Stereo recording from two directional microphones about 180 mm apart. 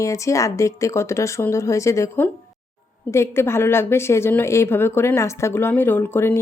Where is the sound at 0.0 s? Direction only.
15° left (ahead or behind).